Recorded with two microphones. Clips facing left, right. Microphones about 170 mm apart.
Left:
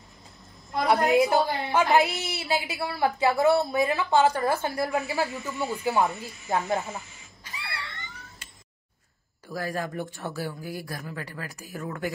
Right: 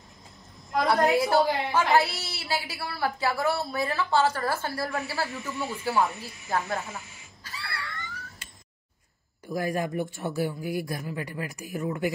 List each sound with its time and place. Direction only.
1.3 s a woman's voice: 20° left (ahead or behind)
7.4 s a sound: 20° left (ahead or behind)
9.5 s speech: 15° right (ahead or behind)